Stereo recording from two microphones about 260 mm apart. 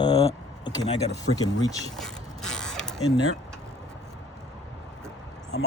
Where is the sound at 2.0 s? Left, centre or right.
Centre.